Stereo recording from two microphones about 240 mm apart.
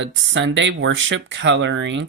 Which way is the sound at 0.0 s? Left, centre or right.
Right.